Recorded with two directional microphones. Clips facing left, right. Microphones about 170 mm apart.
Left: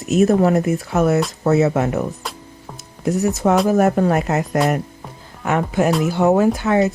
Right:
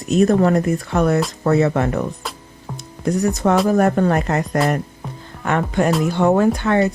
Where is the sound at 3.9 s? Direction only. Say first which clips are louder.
Even; 5° left (ahead or behind).